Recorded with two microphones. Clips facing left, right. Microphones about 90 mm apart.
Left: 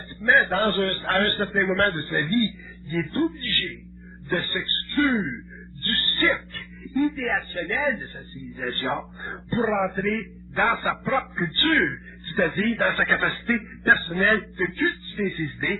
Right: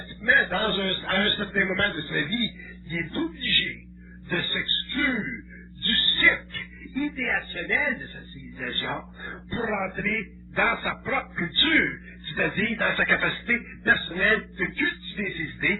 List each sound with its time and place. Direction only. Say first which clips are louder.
0.2 s a man's voice: left 3 dB; 35° left (ahead or behind)